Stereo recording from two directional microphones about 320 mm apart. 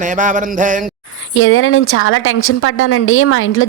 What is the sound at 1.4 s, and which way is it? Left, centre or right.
A woman's voice, left.